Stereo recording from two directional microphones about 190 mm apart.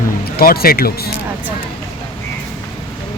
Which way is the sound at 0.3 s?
55° left (ahead or behind).